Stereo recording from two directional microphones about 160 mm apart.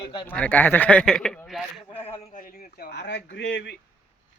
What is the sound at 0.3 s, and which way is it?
Speech, 10° left (ahead or behind).